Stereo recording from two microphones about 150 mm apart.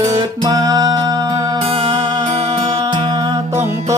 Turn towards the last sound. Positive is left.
turn(degrees=-15)  # may be behind; listen again after turning